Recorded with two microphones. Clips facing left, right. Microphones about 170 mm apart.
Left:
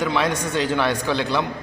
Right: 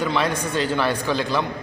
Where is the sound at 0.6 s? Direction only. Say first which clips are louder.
Left 1 dB; 10° left (ahead or behind).